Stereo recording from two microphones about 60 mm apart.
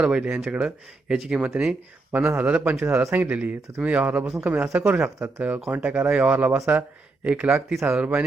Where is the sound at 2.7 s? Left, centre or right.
Right.